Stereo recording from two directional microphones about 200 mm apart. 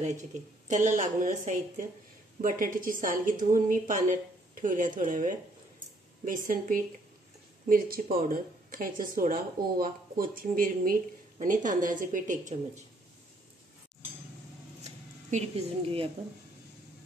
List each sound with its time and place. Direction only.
0.0 s speech: 35° right (ahead or behind)
15.3 s speech: 35° right (ahead or behind)